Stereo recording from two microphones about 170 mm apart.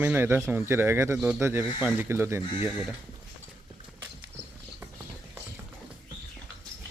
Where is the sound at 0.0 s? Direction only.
10° right (ahead or behind).